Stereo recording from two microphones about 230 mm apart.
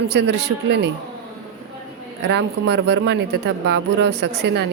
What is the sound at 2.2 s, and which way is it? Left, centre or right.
Speech, right.